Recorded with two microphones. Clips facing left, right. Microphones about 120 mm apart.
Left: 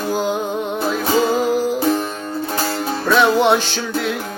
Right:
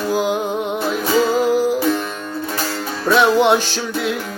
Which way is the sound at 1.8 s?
35° left (ahead or behind).